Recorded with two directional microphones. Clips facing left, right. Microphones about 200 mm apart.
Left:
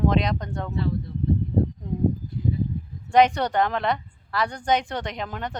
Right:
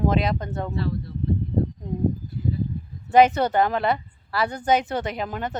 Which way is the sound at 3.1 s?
5° right (ahead or behind).